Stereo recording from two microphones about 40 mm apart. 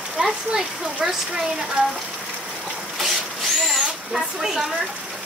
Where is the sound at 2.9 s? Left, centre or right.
Centre.